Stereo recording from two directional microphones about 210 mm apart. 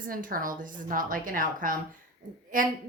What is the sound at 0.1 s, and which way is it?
A woman's voice, 40° right (ahead or behind).